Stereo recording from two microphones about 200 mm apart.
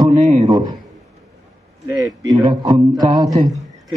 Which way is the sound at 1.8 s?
20° right (ahead or behind).